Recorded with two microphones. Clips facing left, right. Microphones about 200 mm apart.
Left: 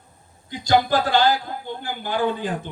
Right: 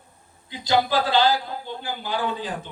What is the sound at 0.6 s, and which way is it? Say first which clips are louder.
Speech: left 2 dB; 50° left (ahead or behind).